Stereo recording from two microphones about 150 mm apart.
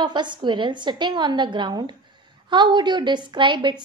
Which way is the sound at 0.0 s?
30° right (ahead or behind).